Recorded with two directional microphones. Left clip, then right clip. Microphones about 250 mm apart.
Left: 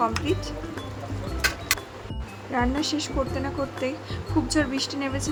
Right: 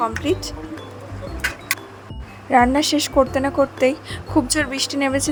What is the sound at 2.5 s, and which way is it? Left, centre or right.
Speech, right.